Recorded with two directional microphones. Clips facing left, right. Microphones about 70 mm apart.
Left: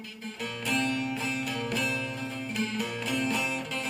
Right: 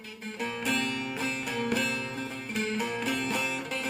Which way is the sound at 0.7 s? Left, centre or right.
Right.